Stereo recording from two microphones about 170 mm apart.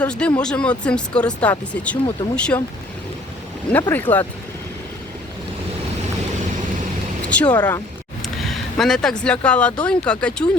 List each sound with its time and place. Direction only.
0.0 s speech: 5° left (ahead or behind)
3.7 s speech: 10° left (ahead or behind)
7.3 s speech: 5° left (ahead or behind)
7.5 s speech: 25° left (ahead or behind)
8.2 s speech: centre (ahead or behind)